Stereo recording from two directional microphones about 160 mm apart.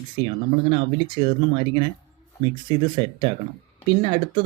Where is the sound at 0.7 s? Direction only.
30° right (ahead or behind).